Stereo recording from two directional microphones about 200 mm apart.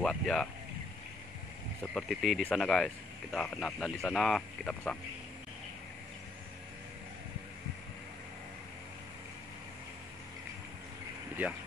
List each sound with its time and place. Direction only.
0.0 s speech: 5° left (ahead or behind)
1.8 s speech: centre (ahead or behind)